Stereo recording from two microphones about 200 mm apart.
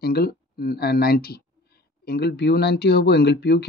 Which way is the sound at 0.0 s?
50° left (ahead or behind).